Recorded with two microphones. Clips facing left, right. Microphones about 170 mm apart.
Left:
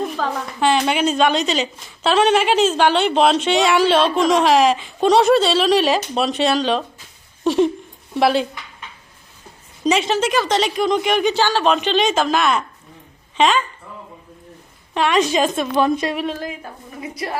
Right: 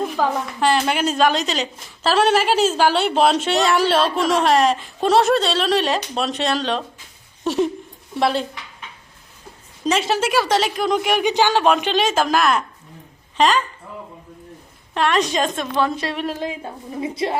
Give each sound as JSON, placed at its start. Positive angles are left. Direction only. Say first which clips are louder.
{"t": 0.6, "sound": "a woman's voice", "louder": "left 2 dB", "side_deg": 0}
{"t": 7.4, "sound": "a sound", "louder": "left 4 dB", "side_deg": 0}
{"t": 8.2, "sound": "a woman's voice", "louder": "left 3 dB", "side_deg": 5}
{"t": 9.8, "sound": "a woman's voice", "louder": "left 2 dB", "side_deg": -5}
{"t": 14.9, "sound": "a woman's voice", "louder": "left 2 dB", "side_deg": 0}
{"t": 16.4, "sound": "a woman's voice", "louder": "right 2 dB", "side_deg": -25}